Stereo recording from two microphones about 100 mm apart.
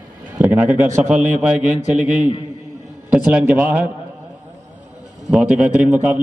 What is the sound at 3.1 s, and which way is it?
Speech, 10° right (ahead or behind).